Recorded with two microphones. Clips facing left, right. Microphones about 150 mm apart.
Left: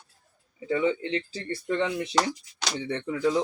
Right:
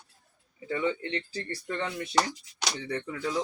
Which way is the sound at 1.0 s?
20° left (ahead or behind).